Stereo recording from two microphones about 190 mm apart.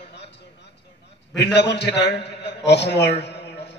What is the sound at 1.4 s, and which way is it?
A man's voice, 65° left (ahead or behind).